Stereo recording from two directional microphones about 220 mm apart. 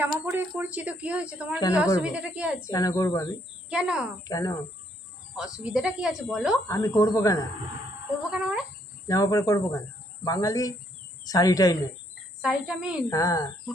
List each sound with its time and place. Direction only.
0.0 s a woman's voice: 10° right (ahead or behind)
2.6 s speech: 15° left (ahead or behind)
3.7 s a woman's voice: 5° right (ahead or behind)
4.2 s speech: 15° left (ahead or behind)
5.4 s a woman's voice: 5° right (ahead or behind)
6.7 s speech: 15° left (ahead or behind)
8.3 s a woman's voice: 5° right (ahead or behind)
9.0 s speech: 15° left (ahead or behind)
12.4 s a woman's voice: 5° right (ahead or behind)
13.1 s speech: 15° left (ahead or behind)